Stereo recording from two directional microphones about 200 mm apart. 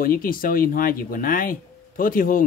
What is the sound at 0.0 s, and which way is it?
Speech, 45° left (ahead or behind).